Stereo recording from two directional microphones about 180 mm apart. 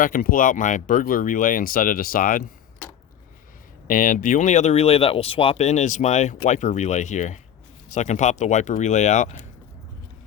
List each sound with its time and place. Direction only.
0.0 s speech: 50° left (ahead or behind)
3.8 s speech: 50° left (ahead or behind)